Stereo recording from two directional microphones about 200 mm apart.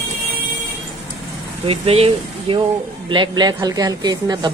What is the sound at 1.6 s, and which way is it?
A woman's voice, 30° right (ahead or behind).